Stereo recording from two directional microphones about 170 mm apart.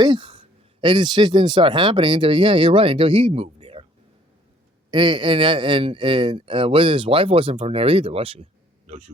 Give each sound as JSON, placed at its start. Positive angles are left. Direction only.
{"t": 0.0, "sound": "speech", "side_deg": -30}
{"t": 4.9, "sound": "a man's voice", "side_deg": -30}